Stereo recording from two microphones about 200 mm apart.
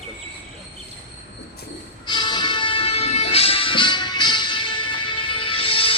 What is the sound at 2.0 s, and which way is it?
Music, 20° left (ahead or behind).